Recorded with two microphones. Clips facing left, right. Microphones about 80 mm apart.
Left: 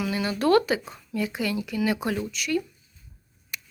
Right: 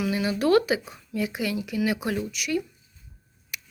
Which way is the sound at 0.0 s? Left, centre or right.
Centre.